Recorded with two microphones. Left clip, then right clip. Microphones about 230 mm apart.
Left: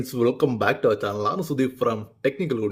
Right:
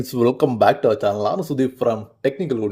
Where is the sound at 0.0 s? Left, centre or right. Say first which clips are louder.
Right 4 dB; centre.